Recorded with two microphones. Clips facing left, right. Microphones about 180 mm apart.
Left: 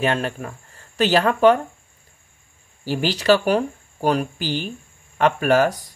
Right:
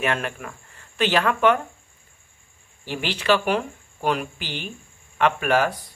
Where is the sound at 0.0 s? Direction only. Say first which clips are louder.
Left 4 dB; 30° left (ahead or behind).